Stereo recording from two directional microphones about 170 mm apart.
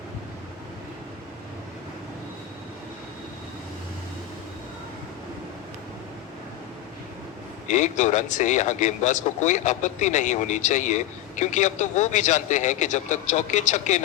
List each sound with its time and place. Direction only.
7.7 s a man's voice: 45° left (ahead or behind)